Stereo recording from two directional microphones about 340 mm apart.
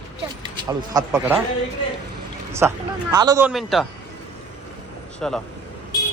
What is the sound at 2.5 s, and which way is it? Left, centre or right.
A man's voice, centre.